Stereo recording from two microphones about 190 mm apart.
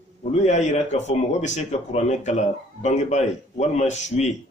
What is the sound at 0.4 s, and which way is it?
Speech, 35° left (ahead or behind).